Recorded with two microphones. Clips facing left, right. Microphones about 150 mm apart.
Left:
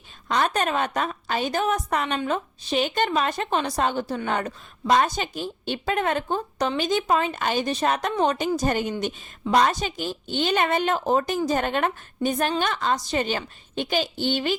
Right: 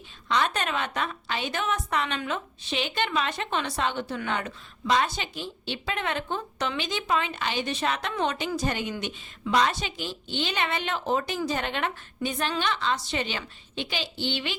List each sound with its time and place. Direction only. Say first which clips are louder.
0.3 s a woman's voice: left 3 dB; 45° left (ahead or behind)